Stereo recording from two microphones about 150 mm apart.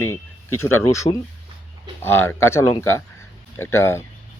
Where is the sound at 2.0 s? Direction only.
15° left (ahead or behind).